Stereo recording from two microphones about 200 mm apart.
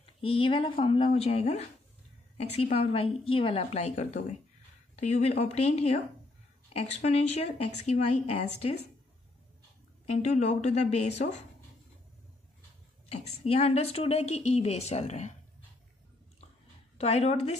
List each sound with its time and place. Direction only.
0.2 s a child's voice: 25° left (ahead or behind)
10.0 s a woman's voice: 35° left (ahead or behind)
13.1 s a woman's voice: 35° left (ahead or behind)
17.0 s a woman's voice: 35° left (ahead or behind)